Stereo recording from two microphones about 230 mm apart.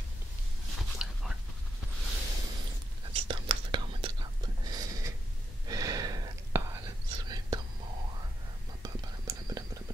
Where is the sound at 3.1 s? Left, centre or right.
Right.